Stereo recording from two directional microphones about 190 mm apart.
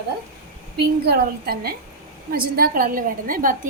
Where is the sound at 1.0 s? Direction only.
55° right (ahead or behind).